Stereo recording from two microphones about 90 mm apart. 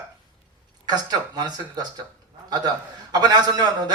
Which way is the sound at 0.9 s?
50° right (ahead or behind).